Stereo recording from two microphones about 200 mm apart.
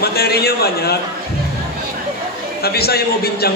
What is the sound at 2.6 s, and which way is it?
Speech, 50° left (ahead or behind).